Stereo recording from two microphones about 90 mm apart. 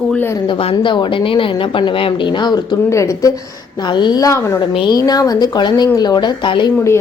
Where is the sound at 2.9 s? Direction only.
35° left (ahead or behind).